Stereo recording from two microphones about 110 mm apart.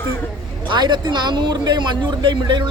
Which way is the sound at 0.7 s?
45° right (ahead or behind).